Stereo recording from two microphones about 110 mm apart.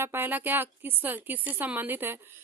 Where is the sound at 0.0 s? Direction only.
20° right (ahead or behind).